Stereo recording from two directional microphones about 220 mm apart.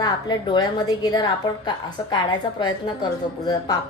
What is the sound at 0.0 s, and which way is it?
A woman's voice, 20° left (ahead or behind).